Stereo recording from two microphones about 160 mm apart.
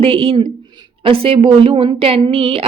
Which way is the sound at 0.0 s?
35° right (ahead or behind).